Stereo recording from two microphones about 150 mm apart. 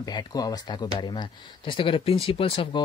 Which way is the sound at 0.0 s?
25° left (ahead or behind).